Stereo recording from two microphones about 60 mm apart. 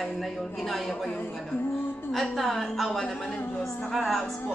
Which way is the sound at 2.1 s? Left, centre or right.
Centre.